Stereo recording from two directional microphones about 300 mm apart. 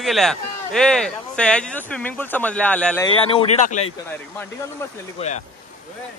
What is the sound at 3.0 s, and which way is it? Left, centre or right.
Speech, centre.